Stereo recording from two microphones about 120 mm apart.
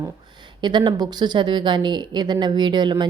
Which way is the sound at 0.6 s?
40° right (ahead or behind).